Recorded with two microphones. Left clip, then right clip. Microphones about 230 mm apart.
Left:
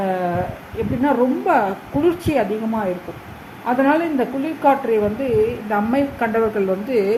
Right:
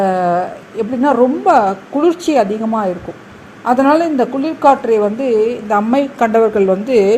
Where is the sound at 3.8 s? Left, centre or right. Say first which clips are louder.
Right 5 dB; right.